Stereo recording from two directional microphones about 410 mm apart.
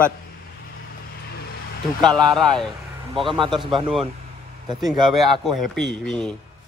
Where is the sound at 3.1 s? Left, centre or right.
Centre.